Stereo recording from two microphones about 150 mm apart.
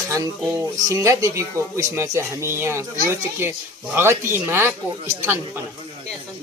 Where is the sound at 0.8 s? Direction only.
20° right (ahead or behind).